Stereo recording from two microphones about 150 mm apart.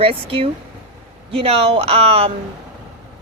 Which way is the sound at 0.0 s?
40° right (ahead or behind).